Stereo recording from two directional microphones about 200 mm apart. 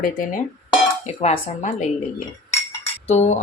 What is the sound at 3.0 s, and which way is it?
Speech, 30° left (ahead or behind).